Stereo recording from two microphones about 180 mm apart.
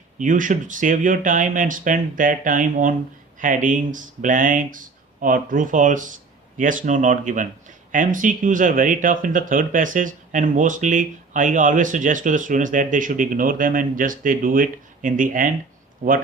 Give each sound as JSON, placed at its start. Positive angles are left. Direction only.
{"t": 0.2, "sound": "speech", "side_deg": -45}